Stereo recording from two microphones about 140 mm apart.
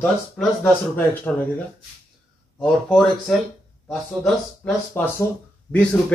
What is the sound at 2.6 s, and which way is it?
Speech, centre (ahead or behind).